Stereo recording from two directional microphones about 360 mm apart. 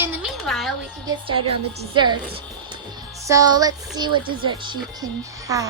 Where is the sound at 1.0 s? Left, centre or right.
Centre.